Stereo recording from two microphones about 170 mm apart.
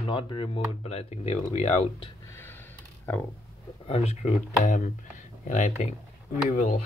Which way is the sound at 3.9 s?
40° left (ahead or behind).